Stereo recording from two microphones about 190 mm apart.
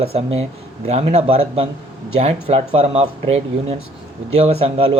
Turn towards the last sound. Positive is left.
turn(degrees=-35)  # may be behind; listen again after turning